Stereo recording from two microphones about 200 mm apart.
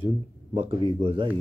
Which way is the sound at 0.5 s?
30° right (ahead or behind).